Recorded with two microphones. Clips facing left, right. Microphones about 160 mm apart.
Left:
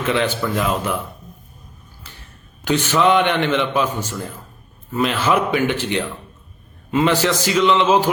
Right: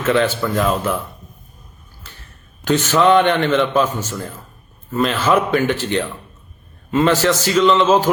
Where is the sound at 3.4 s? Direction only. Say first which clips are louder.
Right 2 dB; 50° right (ahead or behind).